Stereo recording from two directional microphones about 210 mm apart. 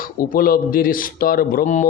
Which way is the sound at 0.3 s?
45° left (ahead or behind).